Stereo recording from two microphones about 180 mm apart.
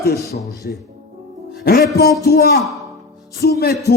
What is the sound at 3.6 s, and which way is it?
Speech, 60° left (ahead or behind).